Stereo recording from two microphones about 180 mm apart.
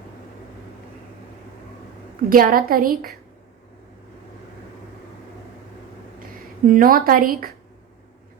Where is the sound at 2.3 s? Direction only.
50° right (ahead or behind).